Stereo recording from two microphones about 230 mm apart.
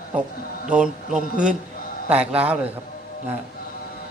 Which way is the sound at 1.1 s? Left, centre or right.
Right.